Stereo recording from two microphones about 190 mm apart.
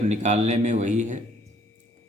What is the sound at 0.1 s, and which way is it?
A man's voice, 35° right (ahead or behind).